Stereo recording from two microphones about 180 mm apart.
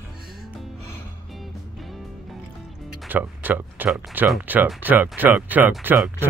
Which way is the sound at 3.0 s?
10° right (ahead or behind).